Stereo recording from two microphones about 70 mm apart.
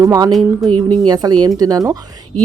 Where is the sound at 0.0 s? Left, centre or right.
Right.